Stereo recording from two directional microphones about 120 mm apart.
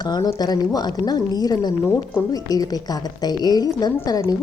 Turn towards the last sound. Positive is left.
turn(degrees=30)  # may be behind; listen again after turning